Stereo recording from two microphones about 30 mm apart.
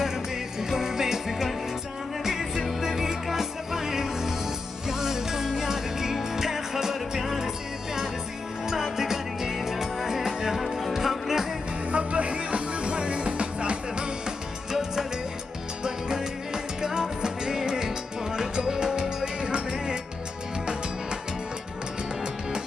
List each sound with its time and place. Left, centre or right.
0.6 s music: centre
2.8 s music: centre
11.9 s music: right
14.2 s music: centre